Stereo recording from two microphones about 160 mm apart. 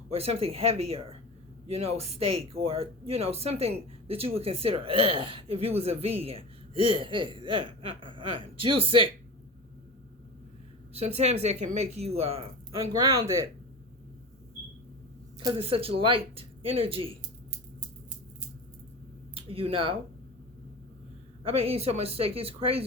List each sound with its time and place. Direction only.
0.1 s speech: 40° right (ahead or behind)
11.0 s speech: 40° right (ahead or behind)
12.8 s speech: 20° right (ahead or behind)
15.4 s speech: 30° right (ahead or behind)
19.3 s speech: 35° right (ahead or behind)
21.6 s speech: 40° right (ahead or behind)